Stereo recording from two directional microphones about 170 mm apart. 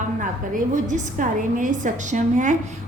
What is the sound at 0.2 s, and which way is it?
A woman's voice, 50° right (ahead or behind).